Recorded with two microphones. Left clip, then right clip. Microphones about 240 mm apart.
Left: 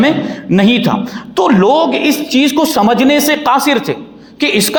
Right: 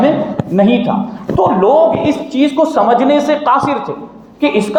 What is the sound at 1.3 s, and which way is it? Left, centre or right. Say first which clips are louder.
A man's voice: even; left.